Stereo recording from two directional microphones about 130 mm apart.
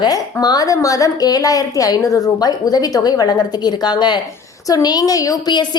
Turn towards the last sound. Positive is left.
turn(degrees=35)  # may be behind; listen again after turning